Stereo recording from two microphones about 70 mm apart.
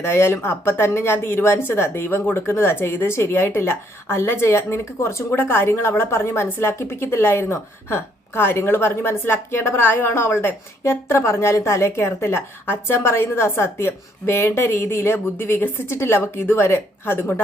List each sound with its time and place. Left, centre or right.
0.0 s a woman's voice: left